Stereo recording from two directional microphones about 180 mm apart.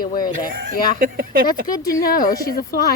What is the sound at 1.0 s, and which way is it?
Speech, 50° right (ahead or behind).